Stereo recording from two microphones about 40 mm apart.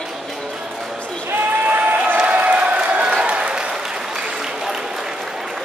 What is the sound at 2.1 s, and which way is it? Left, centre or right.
Applause, right.